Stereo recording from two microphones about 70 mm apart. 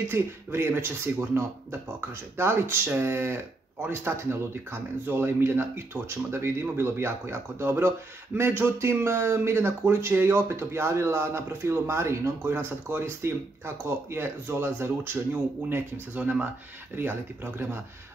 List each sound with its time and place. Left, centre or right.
0.1 s speech: right
15.7 s speech: right